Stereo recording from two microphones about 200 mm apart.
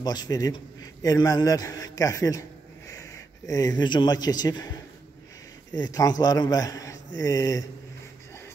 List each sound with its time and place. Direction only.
0.0 s a man's voice: 20° left (ahead or behind)
5.8 s a man's voice: 20° left (ahead or behind)